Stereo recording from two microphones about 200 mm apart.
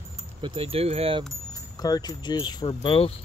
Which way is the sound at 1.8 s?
20° left (ahead or behind).